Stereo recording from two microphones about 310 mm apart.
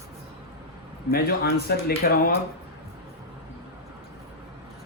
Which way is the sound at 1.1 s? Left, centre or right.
Left.